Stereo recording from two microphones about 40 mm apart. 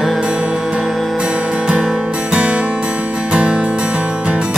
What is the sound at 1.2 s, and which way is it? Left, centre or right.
Music, right.